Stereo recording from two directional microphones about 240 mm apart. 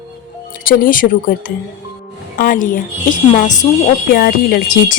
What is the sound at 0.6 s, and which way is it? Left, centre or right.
A woman's voice, left.